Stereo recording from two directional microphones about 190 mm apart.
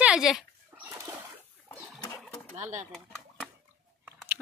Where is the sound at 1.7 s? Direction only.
15° left (ahead or behind).